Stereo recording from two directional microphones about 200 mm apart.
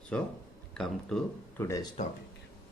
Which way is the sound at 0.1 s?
5° left (ahead or behind).